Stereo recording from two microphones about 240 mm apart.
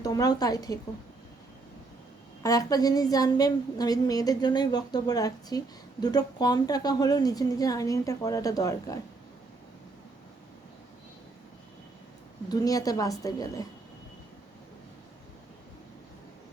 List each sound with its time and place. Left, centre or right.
0.0 s a woman's voice: centre
2.4 s a woman's voice: centre
12.5 s a woman's voice: centre